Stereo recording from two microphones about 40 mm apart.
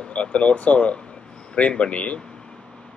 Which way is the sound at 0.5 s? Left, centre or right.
Left.